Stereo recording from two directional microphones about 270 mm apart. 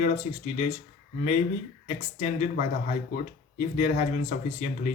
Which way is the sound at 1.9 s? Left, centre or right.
Left.